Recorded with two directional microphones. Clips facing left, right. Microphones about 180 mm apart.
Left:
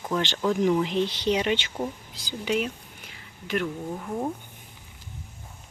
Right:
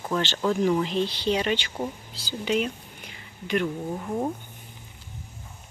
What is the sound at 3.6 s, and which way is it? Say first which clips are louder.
Speech: right 2 dB; 10° right (ahead or behind).